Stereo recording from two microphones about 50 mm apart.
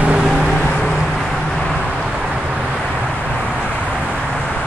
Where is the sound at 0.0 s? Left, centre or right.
Centre.